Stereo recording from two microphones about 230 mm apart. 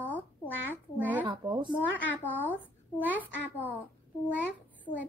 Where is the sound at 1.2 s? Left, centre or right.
Right.